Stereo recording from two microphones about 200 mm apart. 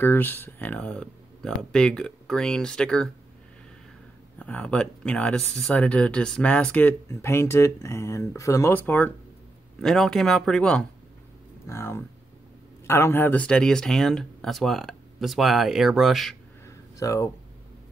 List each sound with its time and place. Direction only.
0.0 s speech: 10° left (ahead or behind)
4.4 s speech: 5° left (ahead or behind)
16.6 s a sound: 15° left (ahead or behind)